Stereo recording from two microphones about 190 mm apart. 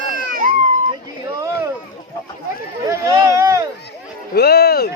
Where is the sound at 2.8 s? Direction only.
20° right (ahead or behind).